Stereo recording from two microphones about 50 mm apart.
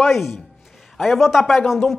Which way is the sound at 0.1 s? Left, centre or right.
Centre.